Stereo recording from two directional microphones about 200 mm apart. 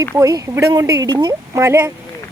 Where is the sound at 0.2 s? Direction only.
15° right (ahead or behind).